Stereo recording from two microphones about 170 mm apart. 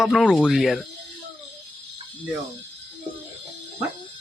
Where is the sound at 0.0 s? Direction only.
Centre (ahead or behind).